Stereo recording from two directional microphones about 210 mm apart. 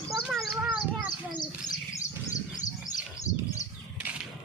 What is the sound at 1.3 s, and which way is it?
Bird, 20° left (ahead or behind).